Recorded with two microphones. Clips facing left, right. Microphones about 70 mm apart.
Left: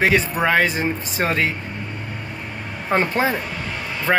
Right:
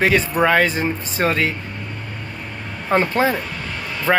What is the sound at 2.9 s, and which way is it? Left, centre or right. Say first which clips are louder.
Speech: right 2 dB; centre.